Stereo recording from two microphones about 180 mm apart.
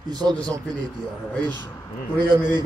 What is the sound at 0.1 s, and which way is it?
Speech, 25° right (ahead or behind).